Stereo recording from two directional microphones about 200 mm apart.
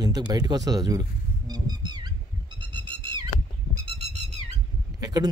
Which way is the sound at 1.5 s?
20° right (ahead or behind).